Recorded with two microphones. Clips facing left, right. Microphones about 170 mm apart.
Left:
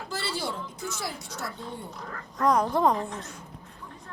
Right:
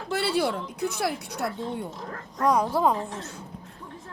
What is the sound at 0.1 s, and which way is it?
A child's voice, 60° right (ahead or behind).